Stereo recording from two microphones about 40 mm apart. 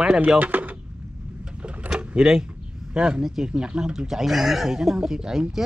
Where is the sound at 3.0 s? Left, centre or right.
Right.